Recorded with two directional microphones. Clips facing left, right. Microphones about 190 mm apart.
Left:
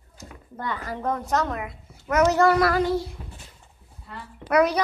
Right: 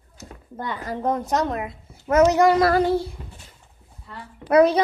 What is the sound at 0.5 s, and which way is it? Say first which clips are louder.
A child's voice: right 2 dB; 20° right (ahead or behind).